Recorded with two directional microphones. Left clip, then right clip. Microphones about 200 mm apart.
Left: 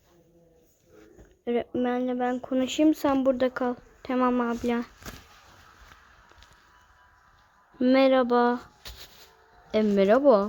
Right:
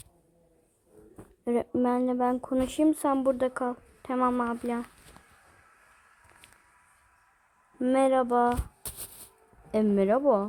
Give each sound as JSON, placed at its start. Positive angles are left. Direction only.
{"t": 1.5, "sound": "speech", "side_deg": -15}
{"t": 7.8, "sound": "speech", "side_deg": 5}
{"t": 8.8, "sound": "a sound", "side_deg": -75}
{"t": 9.9, "sound": "speech", "side_deg": 5}